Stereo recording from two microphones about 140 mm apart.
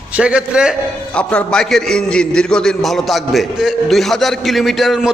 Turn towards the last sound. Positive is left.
turn(degrees=0)  # may be behind; listen again after turning